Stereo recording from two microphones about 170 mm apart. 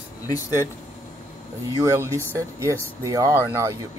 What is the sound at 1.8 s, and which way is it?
Speech, 20° right (ahead or behind).